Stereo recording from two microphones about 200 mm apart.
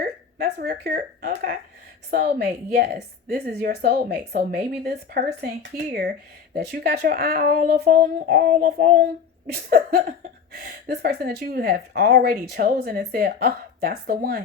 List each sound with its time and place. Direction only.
0.0 s a woman's voice: 50° right (ahead or behind)